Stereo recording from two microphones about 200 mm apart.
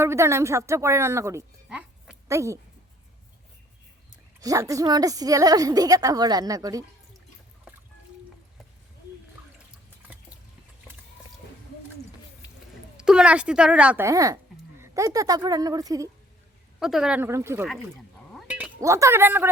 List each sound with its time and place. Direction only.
0.0 s a woman's voice: 15° right (ahead or behind)
4.4 s a woman's voice: 15° right (ahead or behind)
13.0 s a woman's voice: 5° right (ahead or behind)
16.8 s a woman's voice: centre (ahead or behind)
18.3 s a sound: 5° right (ahead or behind)